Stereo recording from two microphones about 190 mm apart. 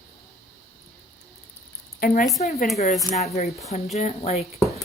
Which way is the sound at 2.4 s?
35° left (ahead or behind).